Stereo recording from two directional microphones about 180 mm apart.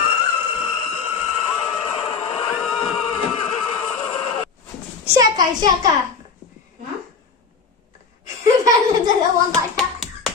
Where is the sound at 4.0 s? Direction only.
30° left (ahead or behind).